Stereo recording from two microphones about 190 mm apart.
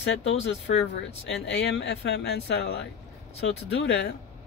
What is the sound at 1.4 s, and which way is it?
Speech, 70° left (ahead or behind).